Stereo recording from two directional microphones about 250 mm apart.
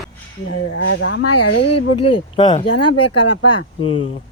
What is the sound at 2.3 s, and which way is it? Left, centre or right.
Speech, centre.